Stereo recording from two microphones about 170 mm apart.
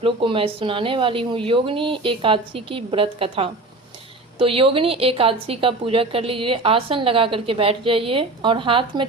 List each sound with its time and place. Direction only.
0.0 s a woman's voice: 30° right (ahead or behind)